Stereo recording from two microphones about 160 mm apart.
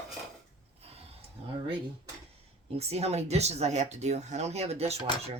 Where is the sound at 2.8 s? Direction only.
40° right (ahead or behind).